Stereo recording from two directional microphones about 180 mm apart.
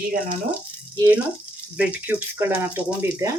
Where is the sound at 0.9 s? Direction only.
10° right (ahead or behind).